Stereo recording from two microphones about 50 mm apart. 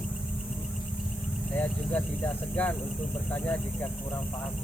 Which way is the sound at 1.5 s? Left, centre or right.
Left.